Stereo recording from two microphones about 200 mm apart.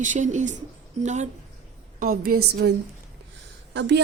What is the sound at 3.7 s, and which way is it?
Speech, 60° right (ahead or behind).